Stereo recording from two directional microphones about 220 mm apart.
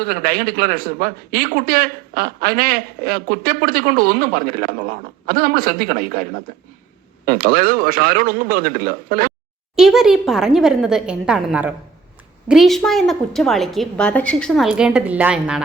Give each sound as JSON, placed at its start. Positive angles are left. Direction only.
{"t": 0.0, "sound": "a man's voice", "side_deg": -40}
{"t": 7.3, "sound": "a man's voice", "side_deg": -40}
{"t": 9.7, "sound": "a woman's voice", "side_deg": 0}